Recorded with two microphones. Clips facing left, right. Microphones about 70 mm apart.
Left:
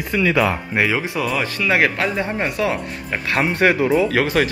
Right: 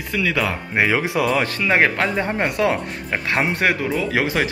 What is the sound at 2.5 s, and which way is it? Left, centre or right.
Speech, right.